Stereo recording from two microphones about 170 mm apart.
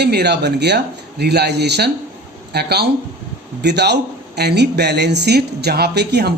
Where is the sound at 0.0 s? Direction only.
75° right (ahead or behind).